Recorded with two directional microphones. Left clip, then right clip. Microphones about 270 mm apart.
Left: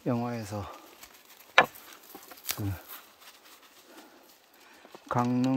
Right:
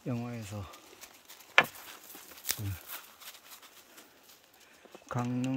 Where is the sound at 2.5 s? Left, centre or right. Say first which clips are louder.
Left 1 dB; centre.